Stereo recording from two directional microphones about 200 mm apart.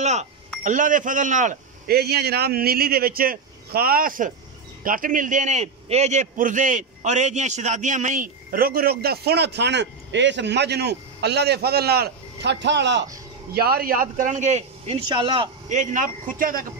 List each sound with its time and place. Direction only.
0.0 s a man's voice: 35° right (ahead or behind); by 13.0 s 60° right (ahead or behind)
13.6 s a man's voice: 50° right (ahead or behind)